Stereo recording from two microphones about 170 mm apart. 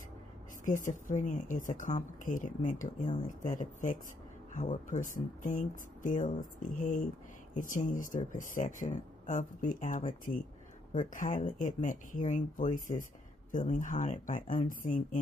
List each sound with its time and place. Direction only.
0.7 s speech: 50° left (ahead or behind)